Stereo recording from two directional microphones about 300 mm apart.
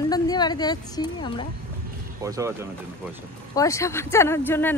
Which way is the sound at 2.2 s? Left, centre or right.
Centre.